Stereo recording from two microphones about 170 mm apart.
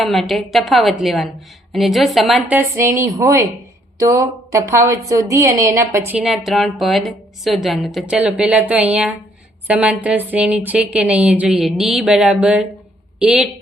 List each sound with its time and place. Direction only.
0.0 s a woman's voice: centre (ahead or behind)
2.6 s a woman's voice: 15° right (ahead or behind)
6.2 s a woman's voice: centre (ahead or behind)